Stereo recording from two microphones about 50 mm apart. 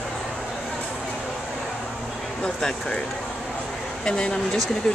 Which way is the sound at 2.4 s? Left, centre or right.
Centre.